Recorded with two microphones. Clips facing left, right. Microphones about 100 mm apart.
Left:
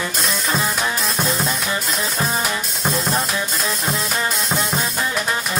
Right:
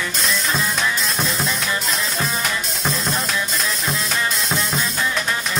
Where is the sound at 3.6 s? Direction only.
30° left (ahead or behind).